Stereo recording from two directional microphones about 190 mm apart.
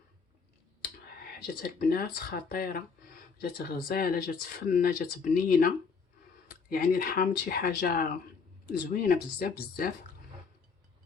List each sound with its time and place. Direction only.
1.6 s speech: 55° left (ahead or behind)